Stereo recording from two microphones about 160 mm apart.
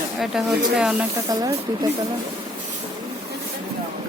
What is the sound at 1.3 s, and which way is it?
Speech, 20° right (ahead or behind).